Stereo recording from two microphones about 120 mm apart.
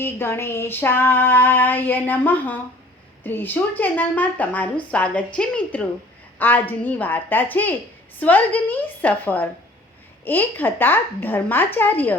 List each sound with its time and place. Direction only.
0.0 s female singing: 20° left (ahead or behind)